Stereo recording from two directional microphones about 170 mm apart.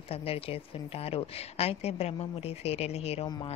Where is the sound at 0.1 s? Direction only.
35° left (ahead or behind).